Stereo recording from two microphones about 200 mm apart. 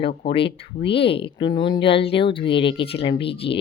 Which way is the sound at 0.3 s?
25° left (ahead or behind).